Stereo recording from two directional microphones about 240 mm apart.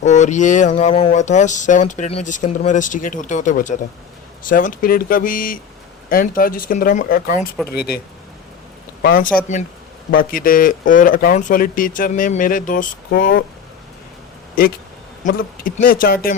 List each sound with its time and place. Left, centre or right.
0.0 s a man's voice: left
14.6 s speech: left